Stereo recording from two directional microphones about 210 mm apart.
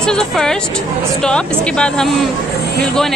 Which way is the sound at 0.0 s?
5° left (ahead or behind).